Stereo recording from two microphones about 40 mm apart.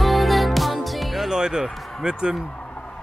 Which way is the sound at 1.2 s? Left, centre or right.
Centre.